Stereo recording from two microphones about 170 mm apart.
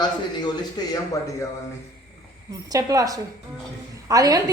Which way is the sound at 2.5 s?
20° right (ahead or behind).